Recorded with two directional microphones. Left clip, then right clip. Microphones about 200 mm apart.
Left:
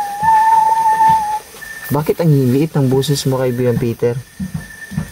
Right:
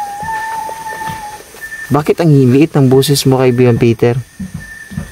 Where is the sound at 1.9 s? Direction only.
40° right (ahead or behind).